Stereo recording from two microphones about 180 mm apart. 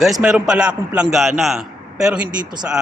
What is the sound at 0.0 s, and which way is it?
A man's voice, centre (ahead or behind).